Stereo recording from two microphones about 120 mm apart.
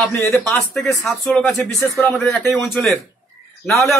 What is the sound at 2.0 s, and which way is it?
Speech, 10° left (ahead or behind).